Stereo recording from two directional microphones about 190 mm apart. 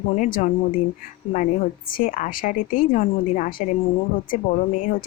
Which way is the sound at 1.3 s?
45° left (ahead or behind).